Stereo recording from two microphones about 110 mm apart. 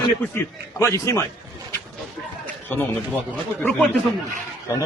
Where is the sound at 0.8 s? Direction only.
30° left (ahead or behind).